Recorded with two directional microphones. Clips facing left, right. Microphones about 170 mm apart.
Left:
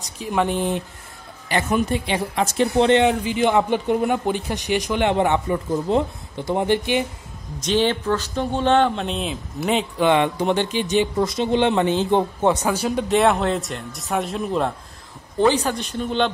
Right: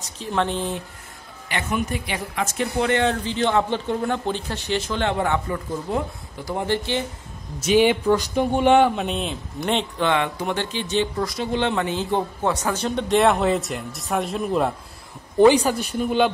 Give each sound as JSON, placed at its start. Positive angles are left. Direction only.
{"t": 0.2, "sound": "speech", "side_deg": 10}
{"t": 1.5, "sound": "speech", "side_deg": 30}
{"t": 3.0, "sound": "speech", "side_deg": 15}
{"t": 7.6, "sound": "speech", "side_deg": -10}
{"t": 10.0, "sound": "speech", "side_deg": 20}
{"t": 15.3, "sound": "speech", "side_deg": -15}